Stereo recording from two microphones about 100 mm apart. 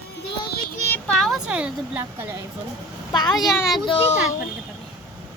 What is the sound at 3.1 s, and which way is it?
Speech, 45° left (ahead or behind).